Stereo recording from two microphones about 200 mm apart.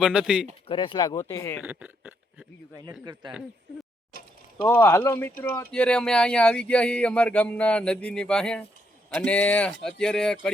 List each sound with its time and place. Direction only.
0.0 s speech: 5° right (ahead or behind)
0.7 s speech: 25° left (ahead or behind)
1.6 s a sound: 10° right (ahead or behind)
3.0 s speech: 20° right (ahead or behind)
4.7 s speech: 10° left (ahead or behind)